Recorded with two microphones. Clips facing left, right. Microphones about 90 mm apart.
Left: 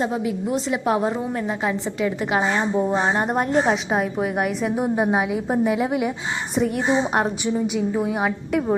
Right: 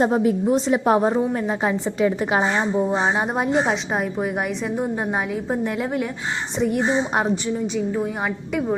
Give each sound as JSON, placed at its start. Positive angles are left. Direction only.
{"t": 0.0, "sound": "a woman's voice", "side_deg": -45}
{"t": 2.7, "sound": "a woman's voice", "side_deg": 0}